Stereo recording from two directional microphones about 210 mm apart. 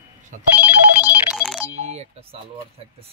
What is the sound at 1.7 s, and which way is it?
Speech, 30° right (ahead or behind).